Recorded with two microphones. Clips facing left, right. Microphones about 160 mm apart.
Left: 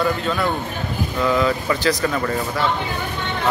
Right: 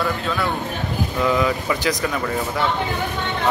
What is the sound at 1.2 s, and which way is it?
A man's voice, 15° right (ahead or behind).